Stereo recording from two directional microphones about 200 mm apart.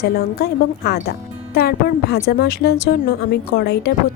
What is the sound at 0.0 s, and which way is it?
Speech, 50° left (ahead or behind).